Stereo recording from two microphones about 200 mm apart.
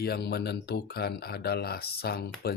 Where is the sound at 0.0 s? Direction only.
55° left (ahead or behind).